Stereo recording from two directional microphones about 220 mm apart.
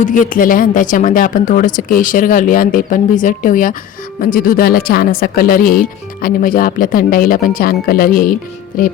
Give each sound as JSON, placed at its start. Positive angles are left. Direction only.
{"t": 0.0, "sound": "speech", "side_deg": 35}